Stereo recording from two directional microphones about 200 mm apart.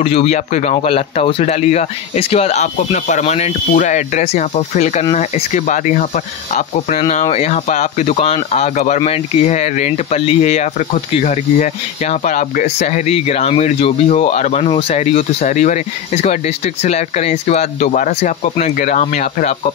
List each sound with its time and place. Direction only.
0.0 s speech: 30° left (ahead or behind)